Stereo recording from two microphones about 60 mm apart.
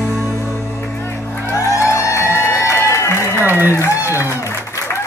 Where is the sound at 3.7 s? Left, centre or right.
Left.